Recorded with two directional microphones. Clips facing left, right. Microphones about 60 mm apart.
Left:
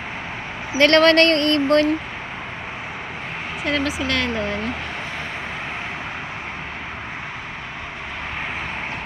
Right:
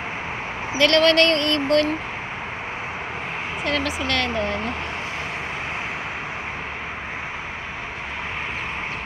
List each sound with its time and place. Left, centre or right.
0.8 s speech: left
3.7 s speech: centre